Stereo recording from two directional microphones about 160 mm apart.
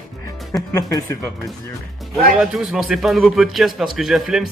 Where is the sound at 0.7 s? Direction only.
20° left (ahead or behind).